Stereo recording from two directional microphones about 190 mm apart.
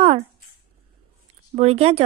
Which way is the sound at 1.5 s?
35° right (ahead or behind).